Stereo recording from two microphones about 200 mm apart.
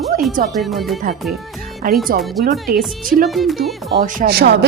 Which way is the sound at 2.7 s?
45° right (ahead or behind).